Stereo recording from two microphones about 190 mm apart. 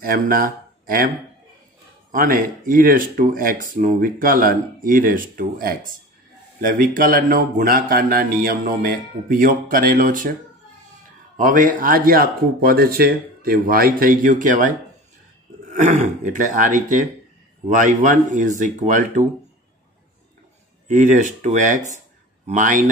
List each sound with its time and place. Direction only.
0.0 s speech: 50° right (ahead or behind)
2.1 s speech: 50° right (ahead or behind)
11.3 s speech: 45° right (ahead or behind)
15.7 s speech: 40° right (ahead or behind)
20.9 s speech: 40° right (ahead or behind)